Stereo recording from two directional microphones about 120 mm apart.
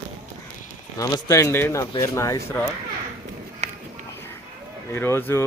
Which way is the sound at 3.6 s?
70° right (ahead or behind).